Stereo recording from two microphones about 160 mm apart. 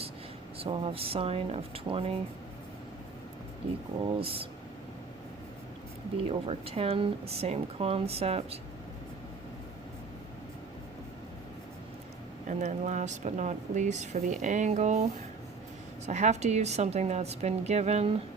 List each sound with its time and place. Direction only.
0.6 s speech: 35° right (ahead or behind)
4.0 s speech: 35° right (ahead or behind)
6.2 s speech: 40° right (ahead or behind)
12.5 s speech: 45° right (ahead or behind)
16.0 s speech: 45° right (ahead or behind)